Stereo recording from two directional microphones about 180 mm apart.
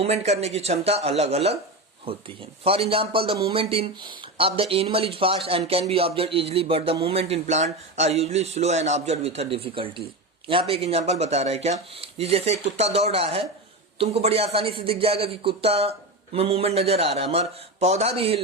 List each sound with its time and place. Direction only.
0.0 s speech: 35° right (ahead or behind)